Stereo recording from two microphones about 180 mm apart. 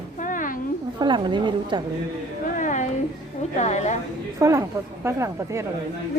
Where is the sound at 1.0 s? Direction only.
25° right (ahead or behind).